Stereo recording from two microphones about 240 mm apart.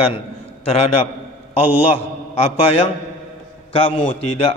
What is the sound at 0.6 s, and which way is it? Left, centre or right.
Speech, left.